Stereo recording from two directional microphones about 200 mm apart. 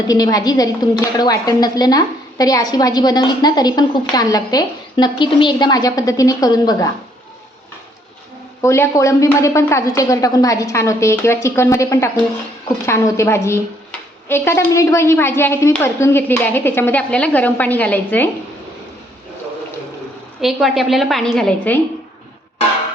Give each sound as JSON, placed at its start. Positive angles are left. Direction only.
{"t": 0.1, "sound": "a woman's voice", "side_deg": 20}
{"t": 8.6, "sound": "a woman's voice", "side_deg": 15}
{"t": 20.4, "sound": "a woman's voice", "side_deg": 0}